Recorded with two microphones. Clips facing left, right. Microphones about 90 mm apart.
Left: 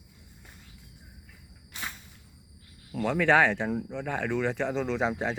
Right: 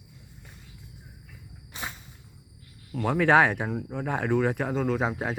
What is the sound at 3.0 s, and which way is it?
Speech, 15° right (ahead or behind).